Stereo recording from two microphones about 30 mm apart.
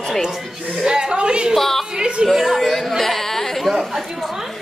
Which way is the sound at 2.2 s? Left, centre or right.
Right.